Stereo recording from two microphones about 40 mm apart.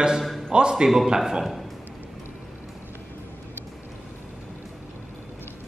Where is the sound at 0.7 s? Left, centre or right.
Centre.